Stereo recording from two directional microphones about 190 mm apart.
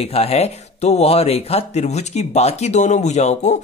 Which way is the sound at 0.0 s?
35° left (ahead or behind).